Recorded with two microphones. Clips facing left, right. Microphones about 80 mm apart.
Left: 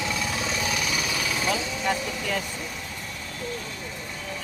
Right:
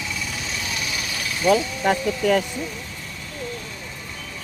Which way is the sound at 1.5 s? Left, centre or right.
Right.